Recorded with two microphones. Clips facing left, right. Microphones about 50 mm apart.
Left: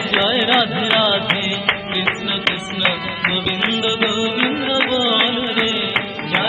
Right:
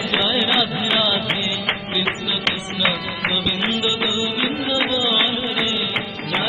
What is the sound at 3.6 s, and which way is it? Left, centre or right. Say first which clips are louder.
Music: left 5 dB; left.